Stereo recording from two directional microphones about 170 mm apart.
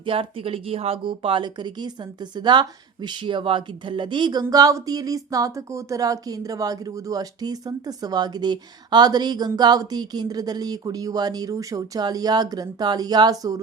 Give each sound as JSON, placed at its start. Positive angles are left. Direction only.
{"t": 0.0, "sound": "speech", "side_deg": -30}